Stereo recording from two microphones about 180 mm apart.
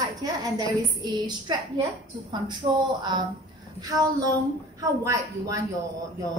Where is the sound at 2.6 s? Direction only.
25° right (ahead or behind).